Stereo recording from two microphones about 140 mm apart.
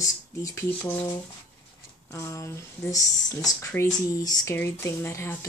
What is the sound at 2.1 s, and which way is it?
Speech, 20° left (ahead or behind).